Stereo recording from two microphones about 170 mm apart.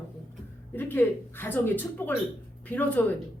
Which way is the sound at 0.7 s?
10° left (ahead or behind).